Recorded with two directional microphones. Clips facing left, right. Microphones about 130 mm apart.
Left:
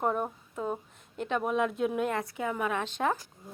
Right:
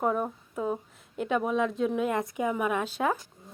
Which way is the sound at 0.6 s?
10° right (ahead or behind).